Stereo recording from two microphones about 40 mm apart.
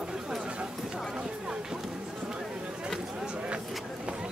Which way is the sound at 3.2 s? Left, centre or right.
Right.